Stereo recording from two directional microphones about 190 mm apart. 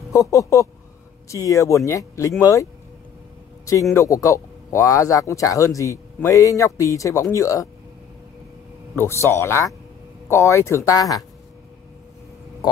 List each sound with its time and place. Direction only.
0.1 s a man's voice: 15° left (ahead or behind)
3.9 s a man's voice: 15° left (ahead or behind)
8.9 s a man's voice: 15° left (ahead or behind)